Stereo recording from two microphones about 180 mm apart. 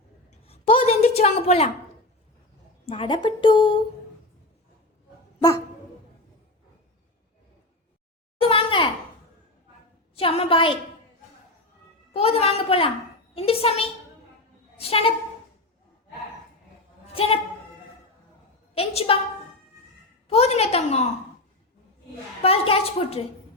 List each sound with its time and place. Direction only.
0.3 s a sound: 35° left (ahead or behind)
2.8 s a woman's voice: 30° left (ahead or behind)
5.4 s dog: 20° left (ahead or behind)
8.4 s a sound: 30° left (ahead or behind)
10.2 s a woman's voice: 30° left (ahead or behind)
12.1 s a woman's voice: 35° left (ahead or behind)
17.1 s a woman's voice: 30° left (ahead or behind)
18.7 s a woman's voice: 30° left (ahead or behind)
20.2 s a woman's voice: 35° left (ahead or behind)
22.4 s a woman's voice: 35° left (ahead or behind)